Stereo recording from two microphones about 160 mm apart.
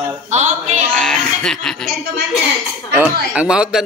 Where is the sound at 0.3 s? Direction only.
45° right (ahead or behind).